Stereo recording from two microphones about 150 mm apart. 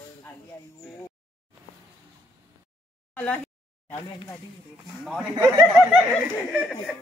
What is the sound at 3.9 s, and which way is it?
Speech, 30° left (ahead or behind).